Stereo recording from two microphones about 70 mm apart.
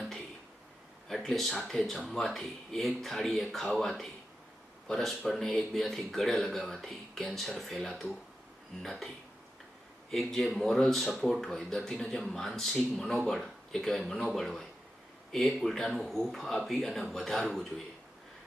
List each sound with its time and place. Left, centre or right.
1.0 s a man's voice: centre